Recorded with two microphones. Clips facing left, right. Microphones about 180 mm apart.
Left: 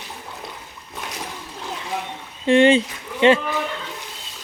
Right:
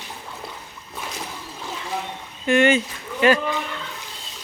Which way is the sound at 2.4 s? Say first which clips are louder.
Left 3 dB; 30° left (ahead or behind).